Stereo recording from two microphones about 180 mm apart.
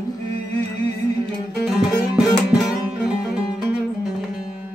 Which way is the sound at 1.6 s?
5° right (ahead or behind).